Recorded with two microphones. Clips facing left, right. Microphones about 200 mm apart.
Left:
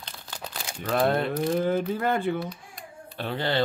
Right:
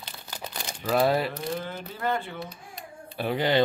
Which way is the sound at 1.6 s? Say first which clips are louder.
Left 10 dB; 50° left (ahead or behind).